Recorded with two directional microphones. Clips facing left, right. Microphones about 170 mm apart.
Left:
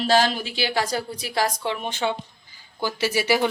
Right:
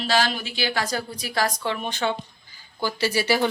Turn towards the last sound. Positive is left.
turn(degrees=15)  # may be behind; listen again after turning